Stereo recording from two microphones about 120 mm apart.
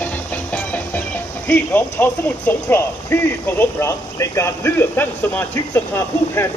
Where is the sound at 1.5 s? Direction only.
15° left (ahead or behind).